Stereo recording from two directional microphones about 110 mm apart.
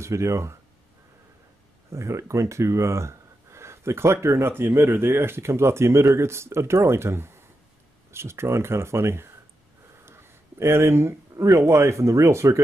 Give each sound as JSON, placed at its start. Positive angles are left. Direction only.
{"t": 0.0, "sound": "speech", "side_deg": -25}
{"t": 1.9, "sound": "speech", "side_deg": -30}